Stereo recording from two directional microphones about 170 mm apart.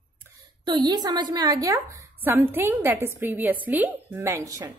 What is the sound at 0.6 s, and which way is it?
A woman's voice, 25° right (ahead or behind).